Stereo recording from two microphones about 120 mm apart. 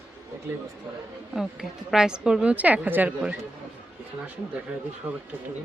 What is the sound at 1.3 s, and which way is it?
A woman's voice, 5° right (ahead or behind).